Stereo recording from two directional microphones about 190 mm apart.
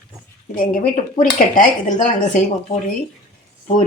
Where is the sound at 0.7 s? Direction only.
45° left (ahead or behind).